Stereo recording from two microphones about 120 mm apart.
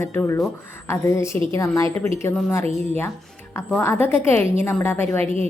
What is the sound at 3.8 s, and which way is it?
A woman's voice, 20° left (ahead or behind).